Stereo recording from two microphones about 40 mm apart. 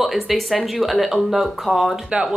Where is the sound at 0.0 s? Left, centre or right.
Centre.